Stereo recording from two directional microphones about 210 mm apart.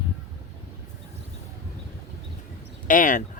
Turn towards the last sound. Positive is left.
turn(degrees=40)  # may be behind; listen again after turning